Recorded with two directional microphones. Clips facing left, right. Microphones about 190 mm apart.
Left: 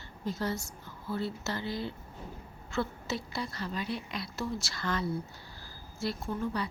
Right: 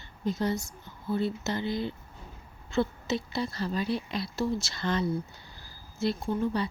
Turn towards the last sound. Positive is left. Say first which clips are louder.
# right 5 dB
turn(degrees=-25)  # may be behind; listen again after turning